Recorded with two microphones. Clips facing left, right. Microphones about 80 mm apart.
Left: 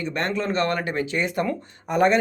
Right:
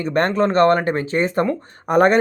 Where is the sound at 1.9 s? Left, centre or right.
Right.